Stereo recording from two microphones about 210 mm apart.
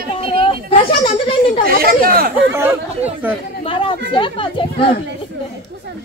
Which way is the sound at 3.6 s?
25° left (ahead or behind).